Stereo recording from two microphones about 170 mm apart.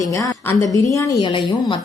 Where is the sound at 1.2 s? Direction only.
30° left (ahead or behind).